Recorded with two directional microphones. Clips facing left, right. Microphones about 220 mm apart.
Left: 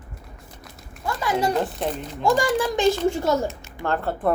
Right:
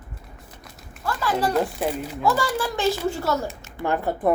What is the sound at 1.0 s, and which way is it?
Speech, 15° left (ahead or behind).